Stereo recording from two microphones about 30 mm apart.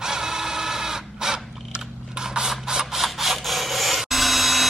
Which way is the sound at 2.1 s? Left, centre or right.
Right.